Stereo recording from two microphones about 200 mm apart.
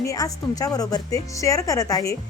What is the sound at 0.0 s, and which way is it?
A woman's voice, 15° left (ahead or behind).